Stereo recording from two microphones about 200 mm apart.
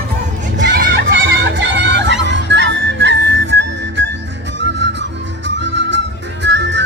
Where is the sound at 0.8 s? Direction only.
65° right (ahead or behind).